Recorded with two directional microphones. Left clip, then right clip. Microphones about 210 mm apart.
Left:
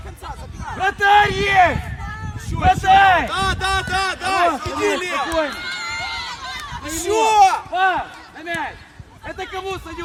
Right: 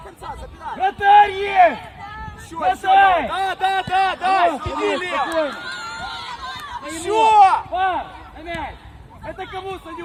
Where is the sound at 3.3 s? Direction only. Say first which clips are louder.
Even; 60° left (ahead or behind).